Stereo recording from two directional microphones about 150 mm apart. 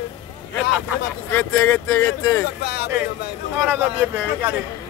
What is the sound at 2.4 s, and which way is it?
Speech, 90° left.